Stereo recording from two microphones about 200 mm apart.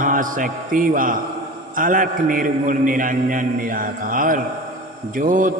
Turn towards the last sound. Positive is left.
turn(degrees=-40)  # may be behind; listen again after turning